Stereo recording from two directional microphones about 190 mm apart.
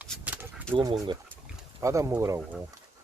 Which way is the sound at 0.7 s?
25° right (ahead or behind).